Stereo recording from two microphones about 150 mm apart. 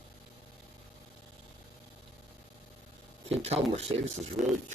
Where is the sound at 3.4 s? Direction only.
45° right (ahead or behind).